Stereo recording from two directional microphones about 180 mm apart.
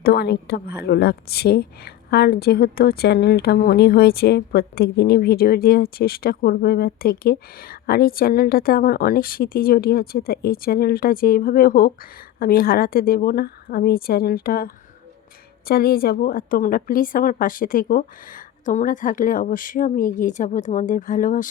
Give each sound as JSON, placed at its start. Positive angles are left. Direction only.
{"t": 0.0, "sound": "a woman's voice", "side_deg": 60}